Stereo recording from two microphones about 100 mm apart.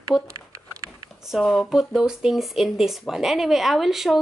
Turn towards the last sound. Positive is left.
turn(degrees=0)  # may be behind; listen again after turning